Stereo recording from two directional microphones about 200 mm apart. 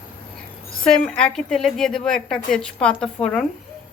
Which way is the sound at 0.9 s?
5° left (ahead or behind).